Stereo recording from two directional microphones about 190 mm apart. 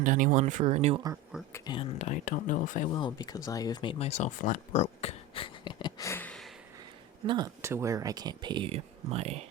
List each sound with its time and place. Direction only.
0.0 s speech: 45° right (ahead or behind)
1.5 s speech: 20° left (ahead or behind)
2.0 s speech: 40° left (ahead or behind)
2.9 s speech: 20° left (ahead or behind); by 6.5 s 5° left (ahead or behind)
7.3 s speech: 20° right (ahead or behind)